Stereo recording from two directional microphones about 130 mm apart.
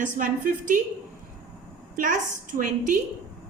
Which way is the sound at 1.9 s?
80° right.